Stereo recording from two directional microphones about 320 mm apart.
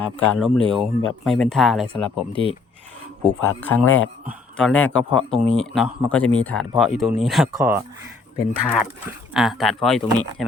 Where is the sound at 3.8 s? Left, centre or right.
Left.